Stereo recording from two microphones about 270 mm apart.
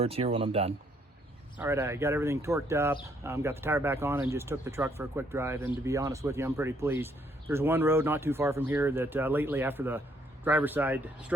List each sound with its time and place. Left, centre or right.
0.0 s speech: right
1.5 s speech: centre